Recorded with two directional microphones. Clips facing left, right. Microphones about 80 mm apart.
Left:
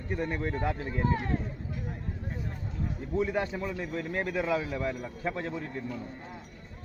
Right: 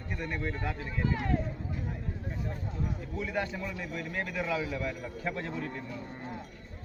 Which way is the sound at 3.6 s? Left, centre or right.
Left.